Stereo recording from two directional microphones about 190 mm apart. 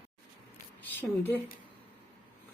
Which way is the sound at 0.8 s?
10° left (ahead or behind).